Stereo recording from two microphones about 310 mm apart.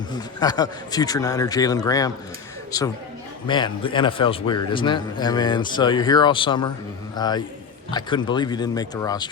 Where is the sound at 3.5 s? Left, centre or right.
Centre.